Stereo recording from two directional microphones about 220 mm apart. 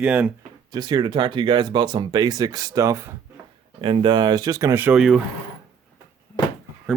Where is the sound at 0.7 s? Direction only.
20° right (ahead or behind); by 5.2 s centre (ahead or behind).